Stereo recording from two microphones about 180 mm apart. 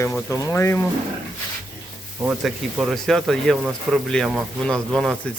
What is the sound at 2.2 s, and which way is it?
Speech, 5° right (ahead or behind).